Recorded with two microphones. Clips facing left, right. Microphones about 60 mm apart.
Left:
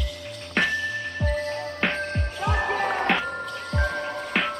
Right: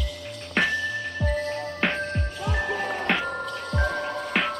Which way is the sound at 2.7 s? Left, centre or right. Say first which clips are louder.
Left 3 dB; left.